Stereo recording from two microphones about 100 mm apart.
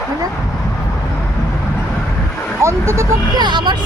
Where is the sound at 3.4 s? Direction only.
50° right (ahead or behind).